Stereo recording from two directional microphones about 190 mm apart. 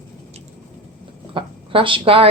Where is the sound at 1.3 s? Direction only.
25° right (ahead or behind).